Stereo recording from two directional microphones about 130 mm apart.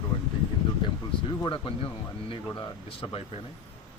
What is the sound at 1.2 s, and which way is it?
Speech, 35° left (ahead or behind).